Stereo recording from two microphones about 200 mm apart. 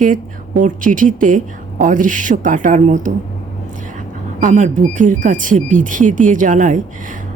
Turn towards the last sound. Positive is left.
turn(degrees=-40)  # may be behind; listen again after turning